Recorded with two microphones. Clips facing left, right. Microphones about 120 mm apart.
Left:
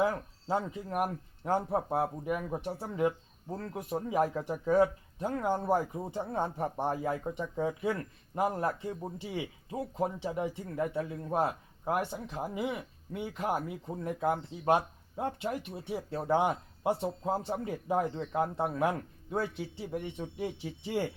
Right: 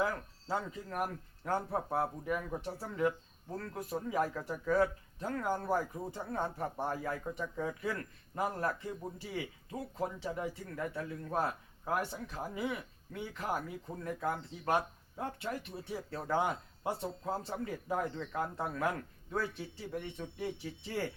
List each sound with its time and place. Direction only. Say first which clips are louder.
0.0 s speech: left 5 dB; 20° left (ahead or behind)